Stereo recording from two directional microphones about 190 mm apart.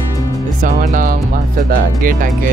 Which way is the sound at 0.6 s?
45° right (ahead or behind).